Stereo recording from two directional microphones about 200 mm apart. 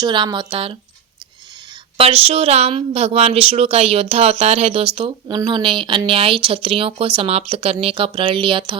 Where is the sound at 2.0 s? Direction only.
30° right (ahead or behind).